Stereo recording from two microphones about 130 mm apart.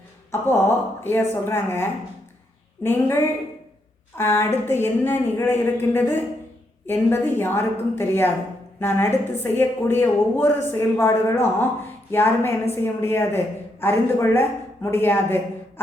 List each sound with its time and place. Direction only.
0.3 s a woman's voice: 20° left (ahead or behind)